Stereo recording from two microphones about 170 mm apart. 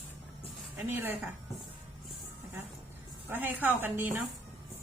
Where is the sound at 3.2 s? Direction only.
10° right (ahead or behind).